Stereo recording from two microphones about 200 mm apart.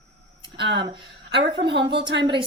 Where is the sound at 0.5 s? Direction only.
55° right (ahead or behind).